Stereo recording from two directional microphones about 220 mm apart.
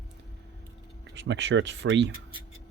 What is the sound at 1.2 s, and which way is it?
Speech, 55° right (ahead or behind).